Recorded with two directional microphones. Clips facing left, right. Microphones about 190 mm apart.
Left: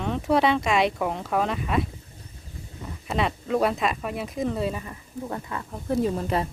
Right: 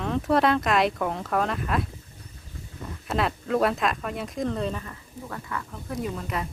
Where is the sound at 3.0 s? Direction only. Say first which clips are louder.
Even; centre (ahead or behind).